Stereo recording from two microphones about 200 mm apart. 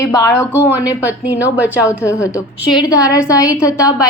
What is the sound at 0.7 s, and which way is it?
A woman's voice, 10° right (ahead or behind).